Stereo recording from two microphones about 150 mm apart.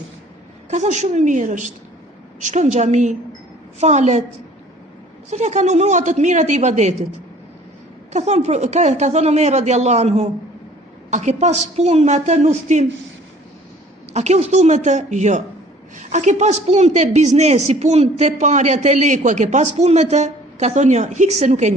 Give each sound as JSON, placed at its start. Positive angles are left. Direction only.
{"t": 0.7, "sound": "a woman's voice", "side_deg": -50}
{"t": 5.3, "sound": "a woman's voice", "side_deg": -50}
{"t": 8.1, "sound": "a woman's voice", "side_deg": -50}
{"t": 14.1, "sound": "a woman's voice", "side_deg": -45}